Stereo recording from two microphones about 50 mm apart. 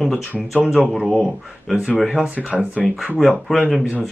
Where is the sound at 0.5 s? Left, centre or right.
Centre.